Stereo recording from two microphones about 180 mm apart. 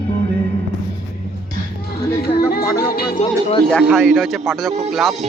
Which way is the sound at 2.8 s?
55° left (ahead or behind).